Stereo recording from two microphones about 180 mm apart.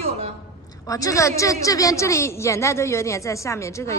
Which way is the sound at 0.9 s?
20° left (ahead or behind).